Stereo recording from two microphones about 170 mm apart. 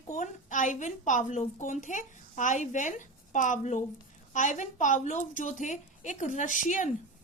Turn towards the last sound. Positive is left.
turn(degrees=45)  # may be behind; listen again after turning